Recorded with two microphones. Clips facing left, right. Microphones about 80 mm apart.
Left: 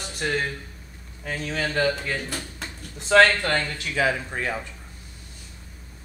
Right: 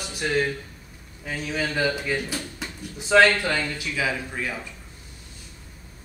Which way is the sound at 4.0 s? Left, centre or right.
Left.